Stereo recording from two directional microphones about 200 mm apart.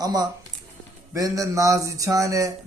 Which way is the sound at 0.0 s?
20° right (ahead or behind).